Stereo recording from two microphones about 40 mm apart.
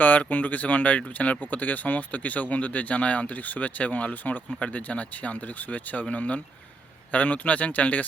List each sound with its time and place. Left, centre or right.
0.0 s speech: left